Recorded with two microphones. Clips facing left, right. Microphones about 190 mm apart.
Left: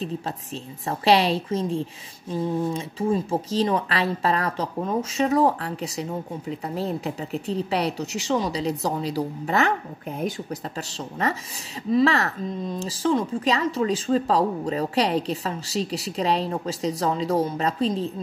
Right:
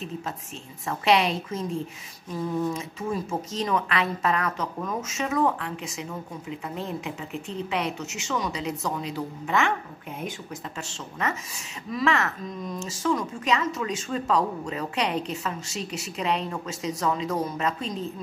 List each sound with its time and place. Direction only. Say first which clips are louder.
0.8 s a woman's voice: left 3 dB; 35° left (ahead or behind)